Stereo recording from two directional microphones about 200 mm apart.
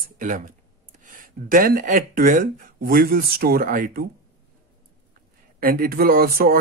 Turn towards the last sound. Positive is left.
turn(degrees=-45)  # may be behind; listen again after turning